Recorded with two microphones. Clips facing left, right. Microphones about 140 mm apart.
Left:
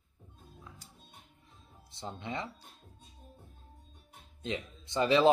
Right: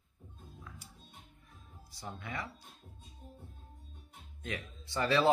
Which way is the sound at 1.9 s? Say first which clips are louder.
Left 4 dB; 25° left (ahead or behind).